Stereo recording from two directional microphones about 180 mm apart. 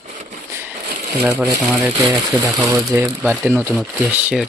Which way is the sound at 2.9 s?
10° right (ahead or behind).